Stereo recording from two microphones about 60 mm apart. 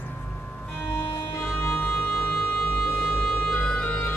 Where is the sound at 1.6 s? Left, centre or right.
Left.